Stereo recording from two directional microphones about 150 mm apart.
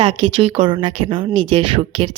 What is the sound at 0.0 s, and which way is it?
Speech, 35° right (ahead or behind).